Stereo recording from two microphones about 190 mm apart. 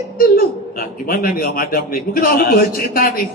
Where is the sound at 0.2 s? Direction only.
50° left (ahead or behind).